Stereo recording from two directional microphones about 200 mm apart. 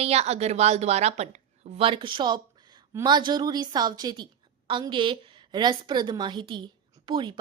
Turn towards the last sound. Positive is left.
turn(degrees=-25)  # may be behind; listen again after turning